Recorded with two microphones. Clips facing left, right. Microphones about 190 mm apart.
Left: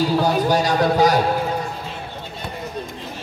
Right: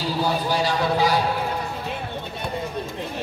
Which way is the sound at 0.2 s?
45° left (ahead or behind).